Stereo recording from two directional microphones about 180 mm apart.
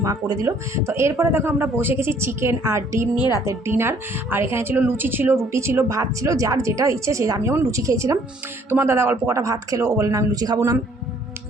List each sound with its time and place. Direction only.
0.0 s a woman's voice: 20° right (ahead or behind)
3.2 s a woman's voice: 20° left (ahead or behind)
3.4 s a woman's voice: 15° right (ahead or behind)